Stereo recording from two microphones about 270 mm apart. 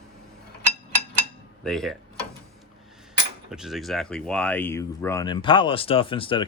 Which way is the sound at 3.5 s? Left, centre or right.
Centre.